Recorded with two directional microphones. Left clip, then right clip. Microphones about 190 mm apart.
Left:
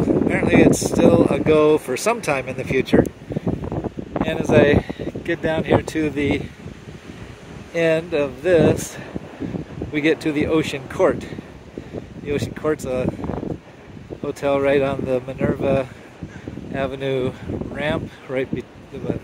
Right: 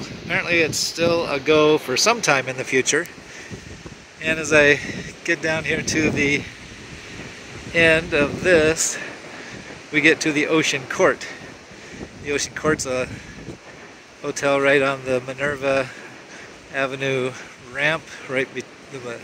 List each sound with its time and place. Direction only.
0.3 s speech: 10° left (ahead or behind)
4.2 s speech: 15° left (ahead or behind)
7.7 s speech: 5° left (ahead or behind)
12.3 s speech: 10° left (ahead or behind)
14.2 s speech: 10° left (ahead or behind)